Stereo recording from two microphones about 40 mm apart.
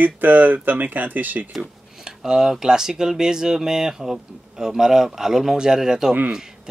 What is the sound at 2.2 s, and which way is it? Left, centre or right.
Speech, centre.